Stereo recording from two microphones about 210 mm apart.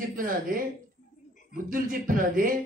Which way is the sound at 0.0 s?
40° right (ahead or behind).